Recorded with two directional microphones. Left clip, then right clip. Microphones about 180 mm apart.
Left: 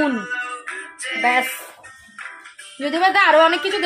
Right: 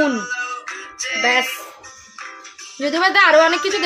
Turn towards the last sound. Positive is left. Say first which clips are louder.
# right 1 dB
turn(degrees=0)  # may be behind; listen again after turning